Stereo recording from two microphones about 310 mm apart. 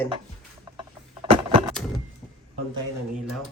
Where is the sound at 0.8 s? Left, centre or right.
Centre.